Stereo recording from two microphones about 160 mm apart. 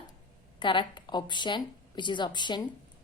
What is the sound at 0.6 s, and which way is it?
A woman's voice, 30° left (ahead or behind).